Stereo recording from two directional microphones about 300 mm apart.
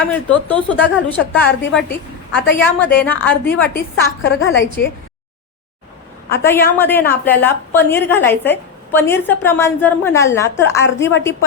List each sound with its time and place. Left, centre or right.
0.0 s a woman's voice: centre
4.2 s a woman's voice: left
6.3 s a woman's voice: centre